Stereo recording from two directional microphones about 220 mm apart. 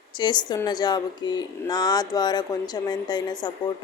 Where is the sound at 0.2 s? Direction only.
20° left (ahead or behind).